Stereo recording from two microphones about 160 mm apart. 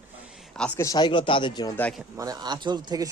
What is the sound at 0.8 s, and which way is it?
Speech, 25° left (ahead or behind).